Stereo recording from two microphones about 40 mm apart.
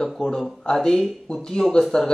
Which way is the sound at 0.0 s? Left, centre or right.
Centre.